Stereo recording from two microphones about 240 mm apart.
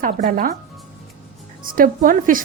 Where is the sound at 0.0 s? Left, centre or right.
Right.